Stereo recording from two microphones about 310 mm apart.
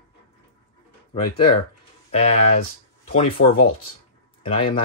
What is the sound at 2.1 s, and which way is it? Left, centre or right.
Speech, left.